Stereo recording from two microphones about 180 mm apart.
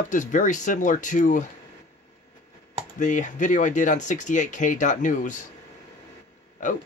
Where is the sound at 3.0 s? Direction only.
45° left (ahead or behind).